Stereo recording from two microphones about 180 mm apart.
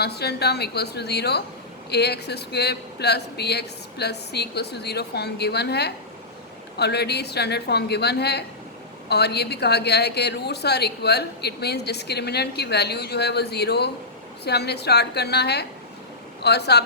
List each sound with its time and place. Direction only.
0.0 s a woman's voice: 65° left (ahead or behind)